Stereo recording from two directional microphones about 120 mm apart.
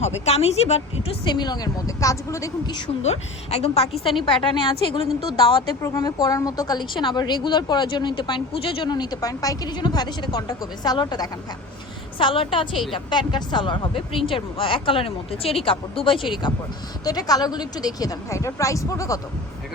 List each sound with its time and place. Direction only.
0.0 s a woman's voice: 60° left (ahead or behind)
1.2 s speech: 40° left (ahead or behind)
3.0 s a woman's voice: 60° left (ahead or behind)
4.3 s speech: 45° left (ahead or behind)
5.8 s speech: 30° left (ahead or behind)
12.2 s speech: 45° left (ahead or behind)
17.0 s speech: 30° left (ahead or behind)